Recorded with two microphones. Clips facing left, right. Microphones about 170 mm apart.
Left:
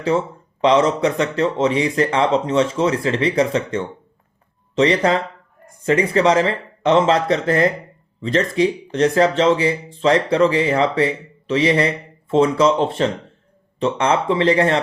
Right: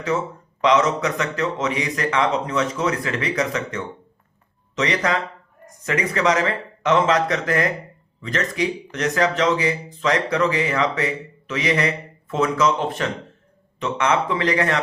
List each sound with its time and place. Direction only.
0.6 s speech: 30° left (ahead or behind)